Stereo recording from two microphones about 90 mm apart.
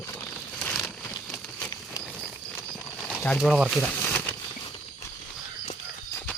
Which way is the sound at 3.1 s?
15° left (ahead or behind).